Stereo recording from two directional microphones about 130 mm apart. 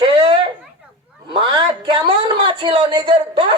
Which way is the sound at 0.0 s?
40° right (ahead or behind).